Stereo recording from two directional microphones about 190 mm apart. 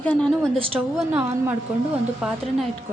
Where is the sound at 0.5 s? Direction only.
30° right (ahead or behind).